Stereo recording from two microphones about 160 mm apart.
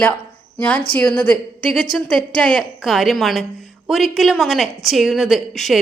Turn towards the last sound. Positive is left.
turn(degrees=0)  # may be behind; listen again after turning